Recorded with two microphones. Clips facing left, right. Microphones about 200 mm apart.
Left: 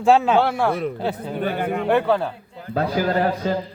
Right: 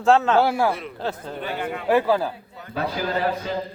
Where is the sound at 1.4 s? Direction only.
50° left (ahead or behind).